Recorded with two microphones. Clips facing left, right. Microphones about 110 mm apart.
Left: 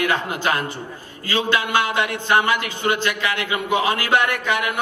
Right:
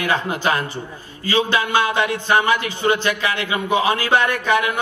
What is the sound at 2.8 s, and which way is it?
A man's voice, 20° right (ahead or behind).